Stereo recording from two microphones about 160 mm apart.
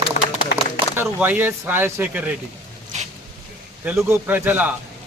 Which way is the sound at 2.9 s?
45° right (ahead or behind).